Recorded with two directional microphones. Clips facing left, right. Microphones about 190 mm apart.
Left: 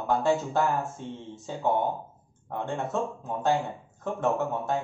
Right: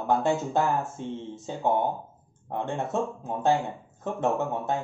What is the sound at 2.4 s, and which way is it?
Speech, 20° right (ahead or behind).